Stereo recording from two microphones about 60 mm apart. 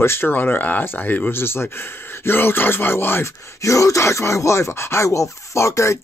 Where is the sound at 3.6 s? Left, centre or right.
Left.